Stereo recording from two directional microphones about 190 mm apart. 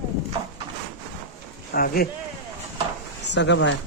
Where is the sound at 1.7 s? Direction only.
50° left (ahead or behind).